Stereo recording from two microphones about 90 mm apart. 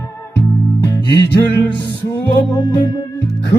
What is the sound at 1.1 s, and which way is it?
Music, 25° left (ahead or behind).